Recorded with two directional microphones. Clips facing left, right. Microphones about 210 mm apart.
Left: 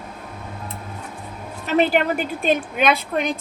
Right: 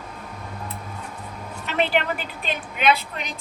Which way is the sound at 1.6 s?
40° left (ahead or behind).